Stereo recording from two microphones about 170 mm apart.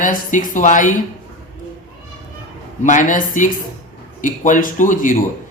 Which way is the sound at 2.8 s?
50° left (ahead or behind).